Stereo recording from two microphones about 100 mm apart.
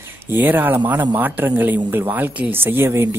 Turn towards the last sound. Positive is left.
turn(degrees=-25)  # may be behind; listen again after turning